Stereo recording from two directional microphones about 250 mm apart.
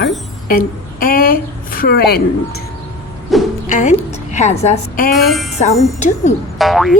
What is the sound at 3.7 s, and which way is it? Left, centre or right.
A woman's voice, left.